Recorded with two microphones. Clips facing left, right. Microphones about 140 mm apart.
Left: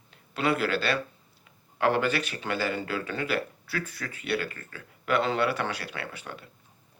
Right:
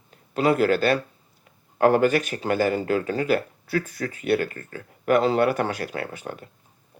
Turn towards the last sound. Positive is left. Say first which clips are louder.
# right 6 dB
turn(degrees=-45)  # may be behind; listen again after turning